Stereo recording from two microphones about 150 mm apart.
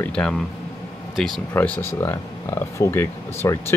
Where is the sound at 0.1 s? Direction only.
5° left (ahead or behind).